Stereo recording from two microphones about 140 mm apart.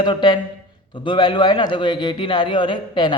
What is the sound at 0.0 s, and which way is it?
A man's voice, 35° left (ahead or behind).